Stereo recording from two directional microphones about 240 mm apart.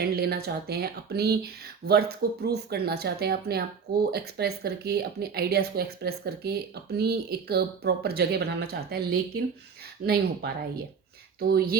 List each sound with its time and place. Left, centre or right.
0.0 s speech: right